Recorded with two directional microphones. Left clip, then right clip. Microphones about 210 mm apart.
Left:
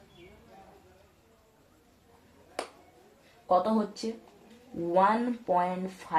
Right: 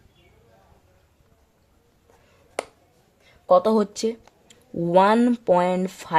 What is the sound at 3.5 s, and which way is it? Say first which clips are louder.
Speech: right 8 dB; 60° right (ahead or behind).